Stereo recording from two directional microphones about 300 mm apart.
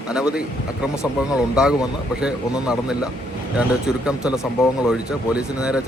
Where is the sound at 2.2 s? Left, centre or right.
Centre.